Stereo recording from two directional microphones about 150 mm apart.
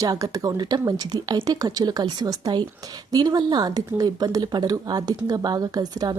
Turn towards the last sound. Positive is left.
turn(degrees=-25)  # may be behind; listen again after turning